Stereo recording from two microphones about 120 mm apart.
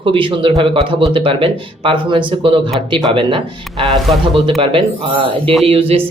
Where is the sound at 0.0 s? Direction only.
45° right (ahead or behind).